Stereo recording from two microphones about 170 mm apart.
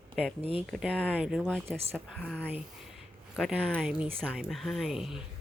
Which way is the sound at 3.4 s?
5° right (ahead or behind).